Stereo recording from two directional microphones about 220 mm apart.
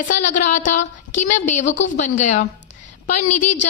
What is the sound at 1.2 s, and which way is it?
A woman's voice, 35° left (ahead or behind).